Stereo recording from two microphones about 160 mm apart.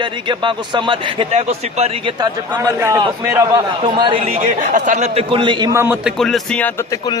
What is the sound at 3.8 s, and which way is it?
Speech, 30° right (ahead or behind).